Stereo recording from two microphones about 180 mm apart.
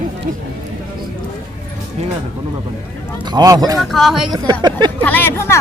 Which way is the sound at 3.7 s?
Centre (ahead or behind).